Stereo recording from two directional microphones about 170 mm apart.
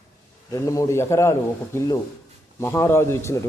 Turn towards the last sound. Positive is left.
turn(degrees=15)  # may be behind; listen again after turning